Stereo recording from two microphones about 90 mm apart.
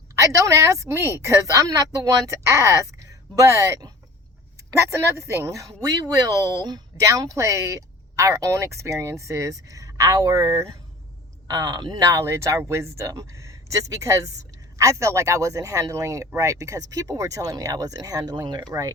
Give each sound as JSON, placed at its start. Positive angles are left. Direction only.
{"t": 0.2, "sound": "speech", "side_deg": -35}
{"t": 6.1, "sound": "speech", "side_deg": -45}
{"t": 11.4, "sound": "speech", "side_deg": -45}